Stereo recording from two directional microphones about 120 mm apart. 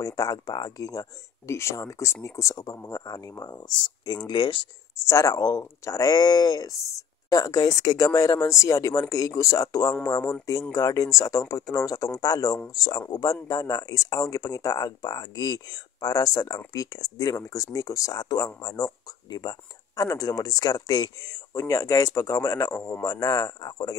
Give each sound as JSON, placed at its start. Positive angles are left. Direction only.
{"t": 0.0, "sound": "speech", "side_deg": 35}
{"t": 5.0, "sound": "speech", "side_deg": 25}